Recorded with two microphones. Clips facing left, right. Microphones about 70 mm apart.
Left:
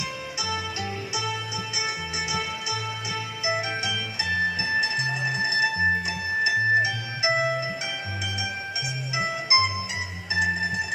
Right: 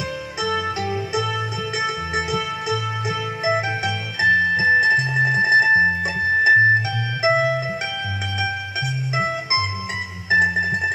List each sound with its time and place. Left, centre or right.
0.4 s music: right
9.1 s music: right